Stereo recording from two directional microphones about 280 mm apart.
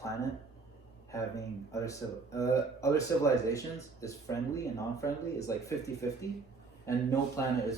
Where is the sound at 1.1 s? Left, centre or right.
Centre.